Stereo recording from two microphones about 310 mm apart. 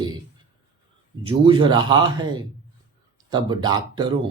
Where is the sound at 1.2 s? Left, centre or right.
Centre.